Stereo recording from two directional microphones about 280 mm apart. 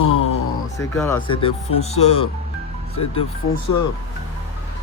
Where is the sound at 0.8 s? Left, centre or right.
Centre.